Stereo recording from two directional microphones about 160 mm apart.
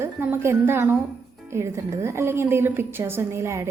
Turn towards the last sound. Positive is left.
turn(degrees=-15)  # may be behind; listen again after turning